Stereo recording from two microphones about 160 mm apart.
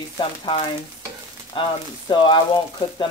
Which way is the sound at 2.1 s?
30° left (ahead or behind).